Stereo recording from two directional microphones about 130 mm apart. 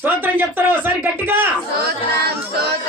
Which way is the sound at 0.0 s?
15° right (ahead or behind).